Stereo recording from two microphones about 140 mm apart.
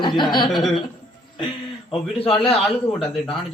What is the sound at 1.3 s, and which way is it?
Speech, 40° left (ahead or behind).